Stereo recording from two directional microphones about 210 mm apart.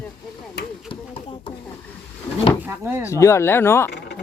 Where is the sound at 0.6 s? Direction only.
55° left (ahead or behind).